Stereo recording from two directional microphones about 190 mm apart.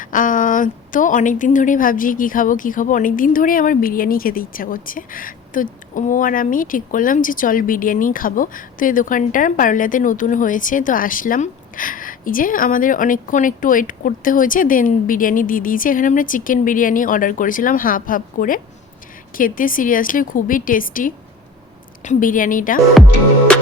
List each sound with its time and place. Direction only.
0.0 s a woman's voice: 45° left (ahead or behind)
23.5 s music: 5° left (ahead or behind)